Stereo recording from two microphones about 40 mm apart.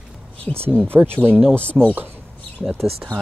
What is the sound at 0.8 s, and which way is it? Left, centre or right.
Speech, right.